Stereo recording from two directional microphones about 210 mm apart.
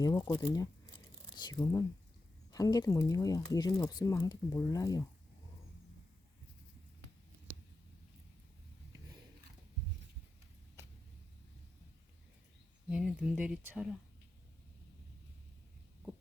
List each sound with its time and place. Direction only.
0.0 s speech: 15° left (ahead or behind)
10.8 s a sound: 15° right (ahead or behind)
12.9 s speech: 5° right (ahead or behind)